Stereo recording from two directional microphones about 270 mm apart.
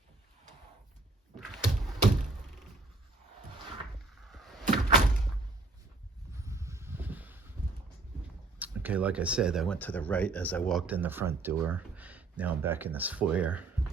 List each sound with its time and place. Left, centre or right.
4.3 s door: centre
6.4 s a sound: centre
8.5 s speech: centre